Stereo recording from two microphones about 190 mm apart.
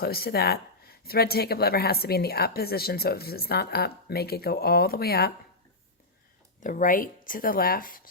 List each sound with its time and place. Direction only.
0.0 s speech: 55° left (ahead or behind)
6.6 s speech: 45° left (ahead or behind)